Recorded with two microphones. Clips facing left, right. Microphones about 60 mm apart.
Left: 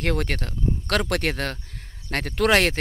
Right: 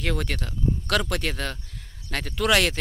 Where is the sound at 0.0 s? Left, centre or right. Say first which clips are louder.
Left 3 dB; left.